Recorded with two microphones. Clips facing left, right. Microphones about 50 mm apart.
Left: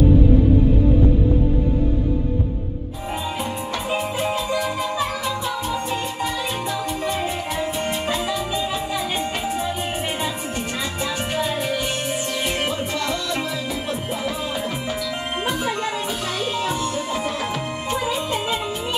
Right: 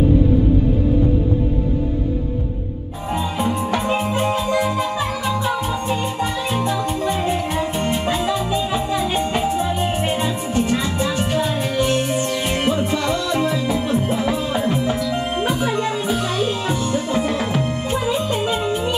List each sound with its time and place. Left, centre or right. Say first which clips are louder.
4.5 s music: right 4 dB; right
7.2 s music: right 4 dB; centre
10.5 s music: right 7 dB; centre
12.6 s music: right 5 dB; centre
15.4 s music: right 2 dB; centre
17.8 s music: right 2 dB; centre